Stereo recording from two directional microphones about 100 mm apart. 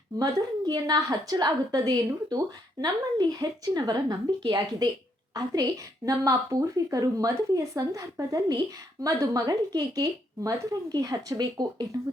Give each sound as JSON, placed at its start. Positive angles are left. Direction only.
{"t": 0.2, "sound": "a woman's voice", "side_deg": -40}